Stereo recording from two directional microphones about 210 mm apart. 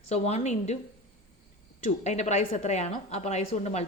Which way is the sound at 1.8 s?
35° left (ahead or behind).